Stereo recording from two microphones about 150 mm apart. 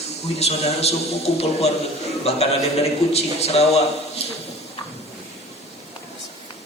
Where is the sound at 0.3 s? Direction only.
45° left (ahead or behind).